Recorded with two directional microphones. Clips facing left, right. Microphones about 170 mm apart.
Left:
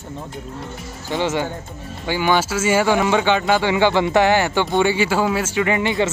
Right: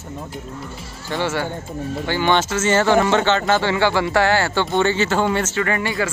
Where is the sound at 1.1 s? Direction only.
15° left (ahead or behind).